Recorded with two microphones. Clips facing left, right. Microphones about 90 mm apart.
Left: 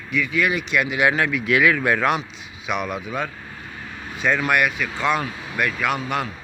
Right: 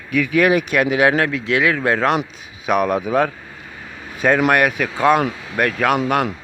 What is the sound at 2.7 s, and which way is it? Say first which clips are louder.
Speech: right 9 dB; 45° right (ahead or behind).